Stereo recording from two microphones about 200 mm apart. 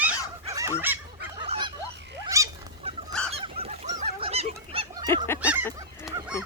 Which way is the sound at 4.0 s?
30° right (ahead or behind).